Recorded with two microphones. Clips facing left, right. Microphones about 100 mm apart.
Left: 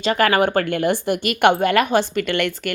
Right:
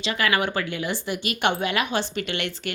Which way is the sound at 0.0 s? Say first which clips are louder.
Left 7 dB; 50° left (ahead or behind).